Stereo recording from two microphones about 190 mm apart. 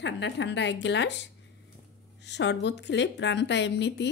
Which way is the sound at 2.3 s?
65° left (ahead or behind).